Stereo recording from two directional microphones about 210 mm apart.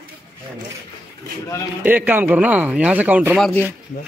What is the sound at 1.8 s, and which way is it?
A man's voice, 10° right (ahead or behind).